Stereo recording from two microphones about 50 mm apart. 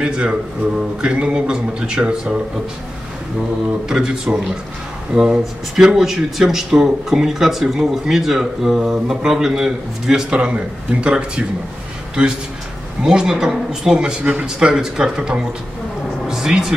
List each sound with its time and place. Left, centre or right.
0.0 s speech: centre
3.9 s speech: centre
5.4 s speech: centre
10.3 s a man's voice: right